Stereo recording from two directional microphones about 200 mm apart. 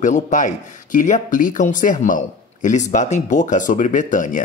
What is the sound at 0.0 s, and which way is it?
A man's voice, 40° left (ahead or behind).